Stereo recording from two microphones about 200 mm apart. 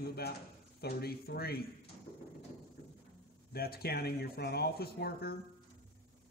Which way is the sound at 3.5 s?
50° left (ahead or behind).